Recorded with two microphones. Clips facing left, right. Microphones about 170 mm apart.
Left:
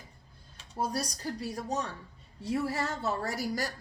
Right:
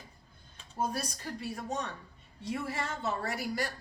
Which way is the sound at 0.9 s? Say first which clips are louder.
Left 3 dB; 35° left (ahead or behind).